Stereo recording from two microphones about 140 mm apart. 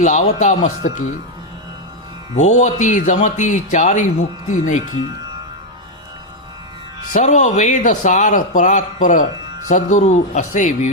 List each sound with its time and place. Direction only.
0.0 s speech: 60° left (ahead or behind)
2.3 s speech: 55° left (ahead or behind)
7.1 s speech: 60° left (ahead or behind)